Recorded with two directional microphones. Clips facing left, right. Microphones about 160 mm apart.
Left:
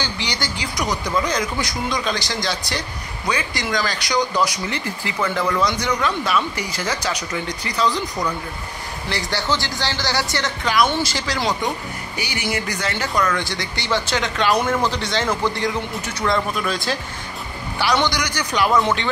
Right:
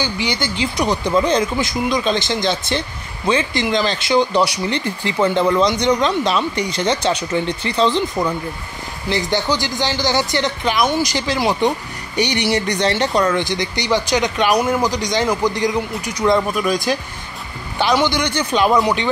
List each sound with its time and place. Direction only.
0.0 s speech: 20° right (ahead or behind)
12.4 s speech: 35° right (ahead or behind)
13.4 s speech: 20° right (ahead or behind)
18.0 s speech: 25° right (ahead or behind)